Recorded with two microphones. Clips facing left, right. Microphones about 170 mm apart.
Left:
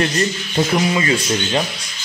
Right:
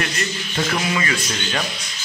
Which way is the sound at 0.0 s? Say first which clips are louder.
Left 7 dB; 25° left (ahead or behind).